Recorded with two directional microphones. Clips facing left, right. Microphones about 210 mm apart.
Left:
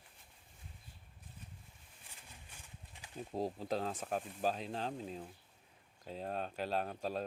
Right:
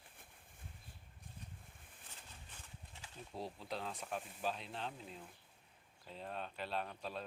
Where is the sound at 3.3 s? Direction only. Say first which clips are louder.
Left 8 dB; 45° left (ahead or behind).